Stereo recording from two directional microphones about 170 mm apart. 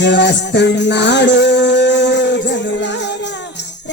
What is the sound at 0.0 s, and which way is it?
Music, 90° left.